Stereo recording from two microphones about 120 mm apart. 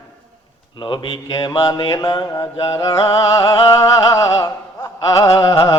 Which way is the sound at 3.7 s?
30° left (ahead or behind).